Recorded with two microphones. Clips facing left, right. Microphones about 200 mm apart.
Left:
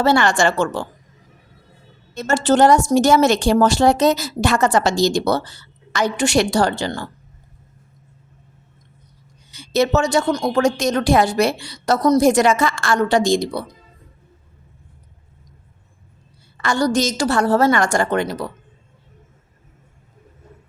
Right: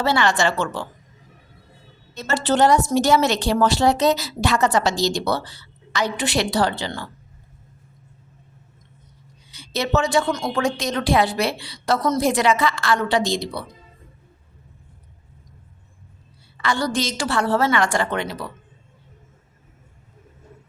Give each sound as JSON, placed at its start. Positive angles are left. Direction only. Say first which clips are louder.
{"t": 0.0, "sound": "a woman's voice", "louder": "left 4 dB", "side_deg": 45}
{"t": 2.1, "sound": "a woman's voice", "louder": "left 4 dB", "side_deg": 45}
{"t": 9.6, "sound": "a woman's voice", "louder": "left 5 dB", "side_deg": 45}
{"t": 16.6, "sound": "a woman's voice", "louder": "left 5 dB", "side_deg": 45}